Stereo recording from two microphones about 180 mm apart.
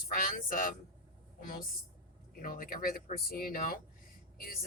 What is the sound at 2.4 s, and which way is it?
Speech, 50° left (ahead or behind).